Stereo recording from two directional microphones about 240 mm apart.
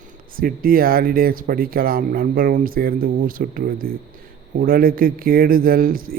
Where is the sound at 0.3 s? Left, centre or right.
Right.